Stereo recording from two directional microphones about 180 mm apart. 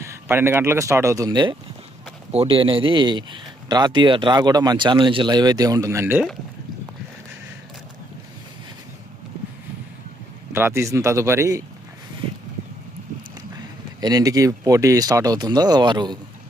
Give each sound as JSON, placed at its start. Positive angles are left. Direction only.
{"t": 0.0, "sound": "speech", "side_deg": -15}
{"t": 10.5, "sound": "speech", "side_deg": -15}
{"t": 14.0, "sound": "speech", "side_deg": -20}